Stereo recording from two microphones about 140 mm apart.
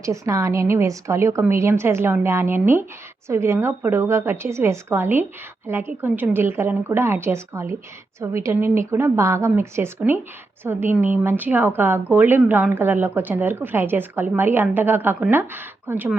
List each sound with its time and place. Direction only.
0.0 s a woman's voice: 20° right (ahead or behind)